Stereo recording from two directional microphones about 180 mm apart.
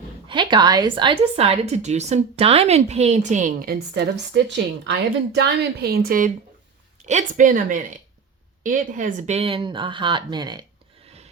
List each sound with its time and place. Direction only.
0.3 s a woman's voice: 25° right (ahead or behind); by 6.3 s 50° right (ahead or behind)
7.0 s a woman's voice: 40° right (ahead or behind); by 10.7 s 25° right (ahead or behind)